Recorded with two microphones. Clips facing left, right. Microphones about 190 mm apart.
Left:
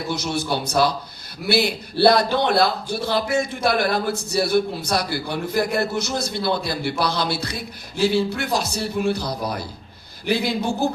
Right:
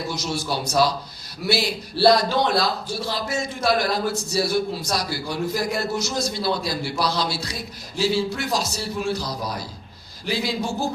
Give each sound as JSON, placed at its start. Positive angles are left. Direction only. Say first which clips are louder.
{"t": 0.2, "sound": "a man's voice", "louder": "left 2 dB", "side_deg": 60}